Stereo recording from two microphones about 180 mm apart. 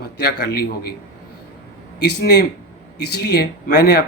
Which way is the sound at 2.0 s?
65° left (ahead or behind).